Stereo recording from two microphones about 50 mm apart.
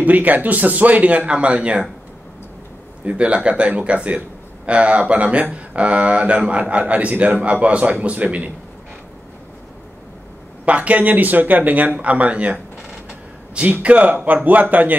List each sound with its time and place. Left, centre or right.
0.0 s speech: right
3.1 s speech: right
10.6 s speech: right
13.6 s speech: right